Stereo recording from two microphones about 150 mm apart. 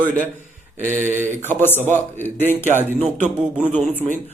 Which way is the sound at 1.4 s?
15° left (ahead or behind).